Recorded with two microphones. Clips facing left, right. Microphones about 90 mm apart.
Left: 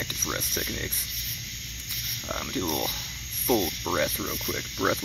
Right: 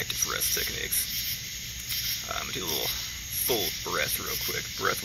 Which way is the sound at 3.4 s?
20° left (ahead or behind).